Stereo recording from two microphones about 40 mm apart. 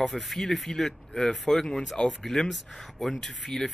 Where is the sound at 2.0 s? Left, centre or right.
Centre.